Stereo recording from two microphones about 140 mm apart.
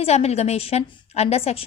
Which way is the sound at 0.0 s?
50° left (ahead or behind).